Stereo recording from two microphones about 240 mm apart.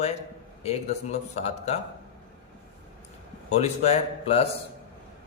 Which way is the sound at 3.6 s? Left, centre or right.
Left.